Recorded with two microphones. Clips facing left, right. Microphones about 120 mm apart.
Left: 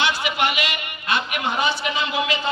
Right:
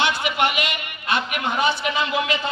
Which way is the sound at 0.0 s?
50° right (ahead or behind).